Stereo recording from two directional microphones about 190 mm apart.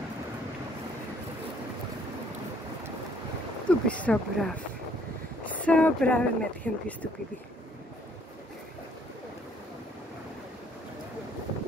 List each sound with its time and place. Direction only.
3.6 s speech: 5° left (ahead or behind)